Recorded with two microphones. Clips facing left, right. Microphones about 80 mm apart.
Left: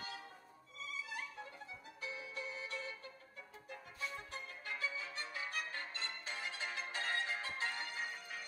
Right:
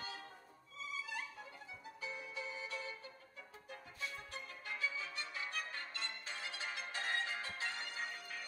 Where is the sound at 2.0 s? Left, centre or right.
Centre.